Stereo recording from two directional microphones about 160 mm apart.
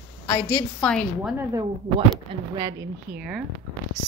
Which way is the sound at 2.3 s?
30° right (ahead or behind).